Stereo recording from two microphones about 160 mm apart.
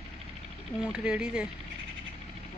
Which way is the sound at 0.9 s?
5° right (ahead or behind).